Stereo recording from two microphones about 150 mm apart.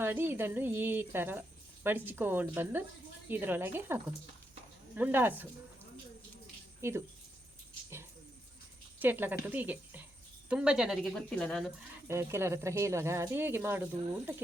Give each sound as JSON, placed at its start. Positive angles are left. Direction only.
{"t": 0.0, "sound": "speech", "side_deg": -15}
{"t": 6.8, "sound": "speech", "side_deg": -20}
{"t": 9.0, "sound": "a woman's voice", "side_deg": -15}
{"t": 12.0, "sound": "speech", "side_deg": -15}